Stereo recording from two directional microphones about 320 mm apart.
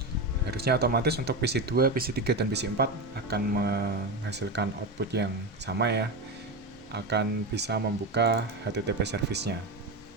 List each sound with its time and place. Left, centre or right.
0.5 s speech: right